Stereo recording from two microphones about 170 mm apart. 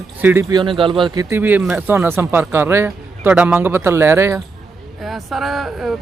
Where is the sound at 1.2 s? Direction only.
10° right (ahead or behind).